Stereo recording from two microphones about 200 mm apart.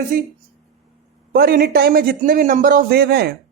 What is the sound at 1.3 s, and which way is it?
Speech, 50° right (ahead or behind).